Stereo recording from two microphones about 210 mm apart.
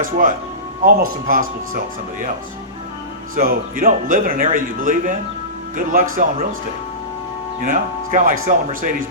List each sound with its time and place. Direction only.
0.0 s speech: 40° right (ahead or behind)
3.3 s speech: 40° right (ahead or behind)
7.6 s speech: 40° right (ahead or behind)